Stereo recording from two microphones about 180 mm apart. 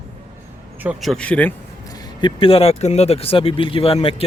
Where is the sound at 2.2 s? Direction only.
30° left (ahead or behind).